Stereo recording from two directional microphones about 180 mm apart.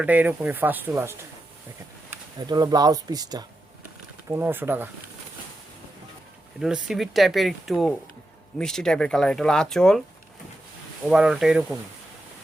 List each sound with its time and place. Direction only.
0.0 s speech: 10° right (ahead or behind)
2.5 s speech: 20° right (ahead or behind)
6.6 s speech: 5° right (ahead or behind)
11.1 s speech: 5° right (ahead or behind)